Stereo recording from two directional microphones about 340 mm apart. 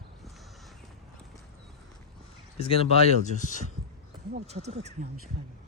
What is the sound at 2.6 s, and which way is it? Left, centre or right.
Speech, centre.